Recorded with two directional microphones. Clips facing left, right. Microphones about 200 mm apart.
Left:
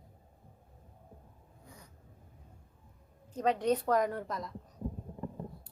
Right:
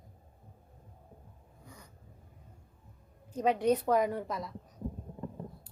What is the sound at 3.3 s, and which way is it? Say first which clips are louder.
A woman's voice: right 2 dB; 10° right (ahead or behind).